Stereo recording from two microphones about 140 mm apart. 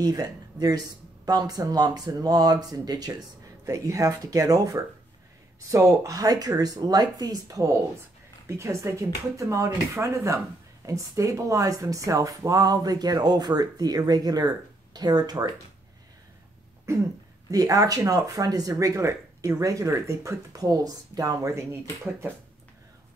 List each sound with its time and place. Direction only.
0.0 s speech: 25° right (ahead or behind)
17.5 s speech: 25° right (ahead or behind)